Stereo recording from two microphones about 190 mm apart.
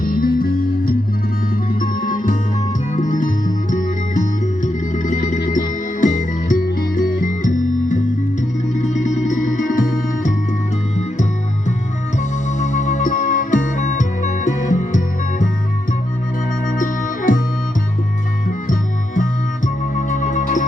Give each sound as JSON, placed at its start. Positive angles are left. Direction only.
{"t": 0.0, "sound": "music", "side_deg": 50}
{"t": 1.7, "sound": "music", "side_deg": 45}
{"t": 12.5, "sound": "music", "side_deg": 40}
{"t": 16.7, "sound": "music", "side_deg": 45}
{"t": 18.4, "sound": "music", "side_deg": 45}